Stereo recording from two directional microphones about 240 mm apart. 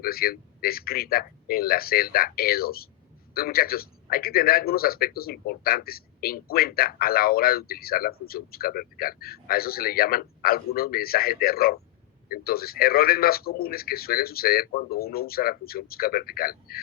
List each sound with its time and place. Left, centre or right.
0.0 s a man's voice: left